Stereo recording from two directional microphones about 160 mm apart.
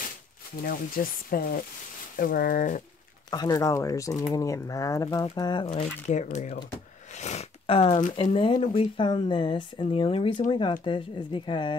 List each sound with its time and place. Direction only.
0.7 s speech: 65° left (ahead or behind)
3.3 s speech: 25° left (ahead or behind)
6.0 s speech: 45° left (ahead or behind)
7.2 s a sound: 45° left (ahead or behind)
8.1 s speech: 35° left (ahead or behind)